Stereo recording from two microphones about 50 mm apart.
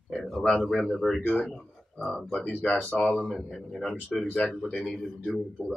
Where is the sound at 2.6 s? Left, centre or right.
Left.